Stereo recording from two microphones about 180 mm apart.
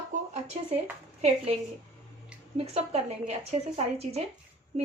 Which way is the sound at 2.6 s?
35° right (ahead or behind).